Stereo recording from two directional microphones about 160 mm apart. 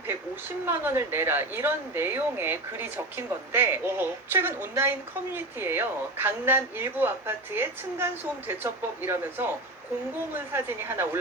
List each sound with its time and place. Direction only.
0.1 s speech: 15° right (ahead or behind)